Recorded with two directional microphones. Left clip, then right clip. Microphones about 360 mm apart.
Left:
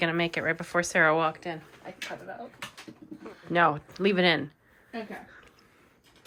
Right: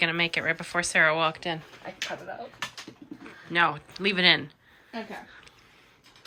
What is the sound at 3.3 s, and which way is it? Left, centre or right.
Speech, centre.